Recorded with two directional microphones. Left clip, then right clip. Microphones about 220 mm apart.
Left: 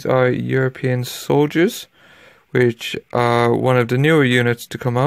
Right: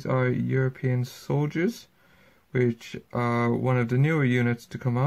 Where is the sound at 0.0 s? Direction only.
35° left (ahead or behind).